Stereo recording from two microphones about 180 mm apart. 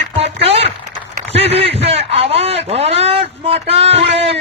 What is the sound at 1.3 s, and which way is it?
A man's voice, 35° right (ahead or behind).